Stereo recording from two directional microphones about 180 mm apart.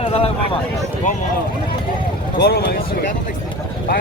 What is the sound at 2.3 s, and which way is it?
Speech, 60° left (ahead or behind).